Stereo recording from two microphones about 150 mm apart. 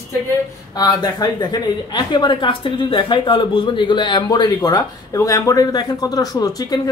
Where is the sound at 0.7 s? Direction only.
25° left (ahead or behind).